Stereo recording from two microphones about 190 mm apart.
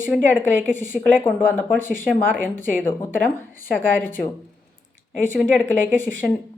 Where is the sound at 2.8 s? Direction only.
10° left (ahead or behind).